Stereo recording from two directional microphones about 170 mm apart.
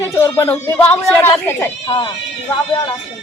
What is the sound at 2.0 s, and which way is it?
Speech, 25° left (ahead or behind).